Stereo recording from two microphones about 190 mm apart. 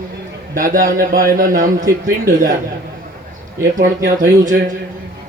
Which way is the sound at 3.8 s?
45° right (ahead or behind).